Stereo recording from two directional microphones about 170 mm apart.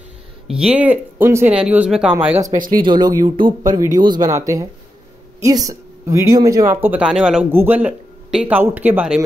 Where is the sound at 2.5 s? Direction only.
55° right (ahead or behind).